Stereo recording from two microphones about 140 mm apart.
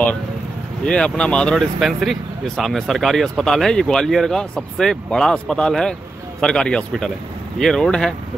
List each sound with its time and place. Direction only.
0.8 s speech: 5° left (ahead or behind)